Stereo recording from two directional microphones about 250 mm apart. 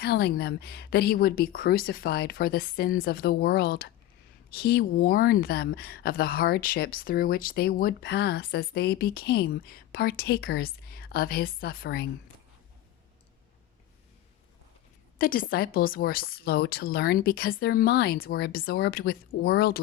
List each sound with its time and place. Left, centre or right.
0.0 s speech: left
15.2 s speech: left